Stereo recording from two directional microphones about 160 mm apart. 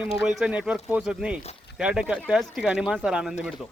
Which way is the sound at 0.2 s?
Centre (ahead or behind).